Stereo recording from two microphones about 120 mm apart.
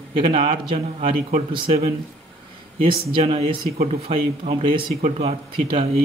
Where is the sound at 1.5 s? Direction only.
45° right (ahead or behind).